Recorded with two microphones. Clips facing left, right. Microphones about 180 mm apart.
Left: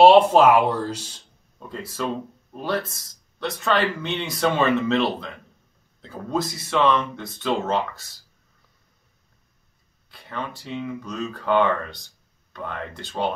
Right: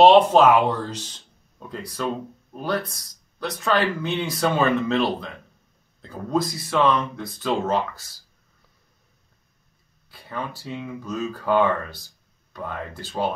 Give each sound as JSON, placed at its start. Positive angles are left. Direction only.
{"t": 0.0, "sound": "speech", "side_deg": 10}
{"t": 10.1, "sound": "speech", "side_deg": 0}